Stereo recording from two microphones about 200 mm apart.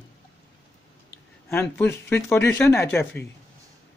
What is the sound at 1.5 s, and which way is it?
Speech, 10° left (ahead or behind).